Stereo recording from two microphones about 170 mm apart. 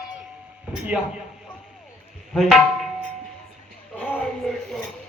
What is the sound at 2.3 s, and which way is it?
Music, centre (ahead or behind).